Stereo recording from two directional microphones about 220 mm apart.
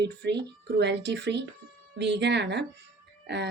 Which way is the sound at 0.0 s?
50° right (ahead or behind).